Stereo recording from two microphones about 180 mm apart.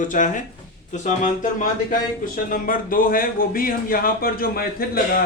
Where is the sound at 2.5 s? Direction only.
50° left (ahead or behind).